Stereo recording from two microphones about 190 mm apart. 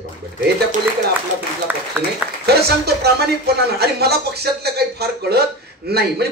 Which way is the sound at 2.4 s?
60° right (ahead or behind).